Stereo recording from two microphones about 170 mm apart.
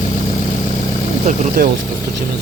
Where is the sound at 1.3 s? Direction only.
60° right (ahead or behind).